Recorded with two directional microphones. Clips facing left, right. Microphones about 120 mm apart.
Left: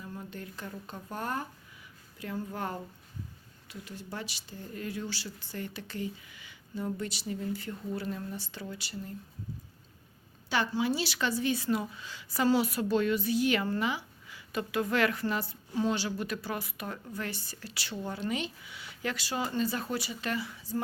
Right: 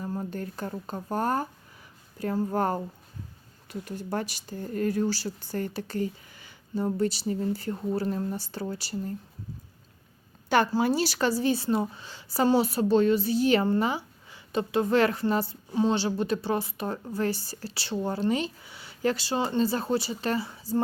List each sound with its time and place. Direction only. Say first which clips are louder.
0.0 s speech: right 9 dB; 40° right (ahead or behind)
10.7 s speech: right 5 dB; 40° right (ahead or behind)